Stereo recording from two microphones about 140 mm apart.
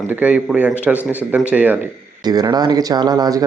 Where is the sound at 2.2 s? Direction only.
30° right (ahead or behind).